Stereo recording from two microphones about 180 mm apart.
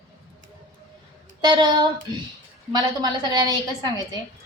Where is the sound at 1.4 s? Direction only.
25° right (ahead or behind).